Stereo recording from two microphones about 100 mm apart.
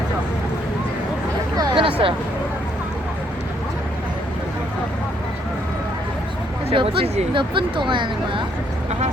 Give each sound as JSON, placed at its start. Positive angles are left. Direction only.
{"t": 1.7, "sound": "a sound", "side_deg": -65}
{"t": 6.7, "sound": "speech", "side_deg": -70}
{"t": 7.3, "sound": "speech", "side_deg": -55}